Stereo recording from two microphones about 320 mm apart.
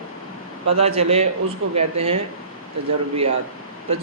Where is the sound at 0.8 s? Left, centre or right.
Centre.